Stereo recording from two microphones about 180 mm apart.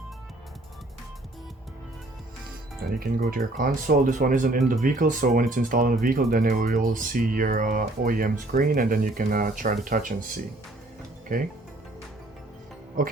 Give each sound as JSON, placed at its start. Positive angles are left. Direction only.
{"t": 3.0, "sound": "speech", "side_deg": -55}
{"t": 11.3, "sound": "speech", "side_deg": -50}